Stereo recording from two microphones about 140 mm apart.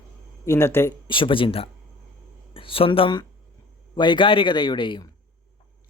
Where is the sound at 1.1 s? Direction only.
35° left (ahead or behind).